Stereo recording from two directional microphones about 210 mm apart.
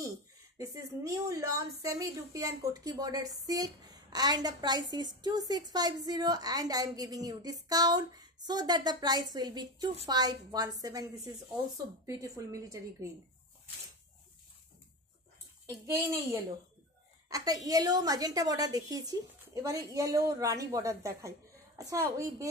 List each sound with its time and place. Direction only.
0.6 s a woman's voice: 15° right (ahead or behind)
15.6 s a woman's voice: 15° right (ahead or behind)